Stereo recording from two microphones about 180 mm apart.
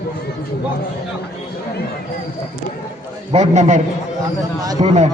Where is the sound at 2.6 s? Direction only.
45° left (ahead or behind).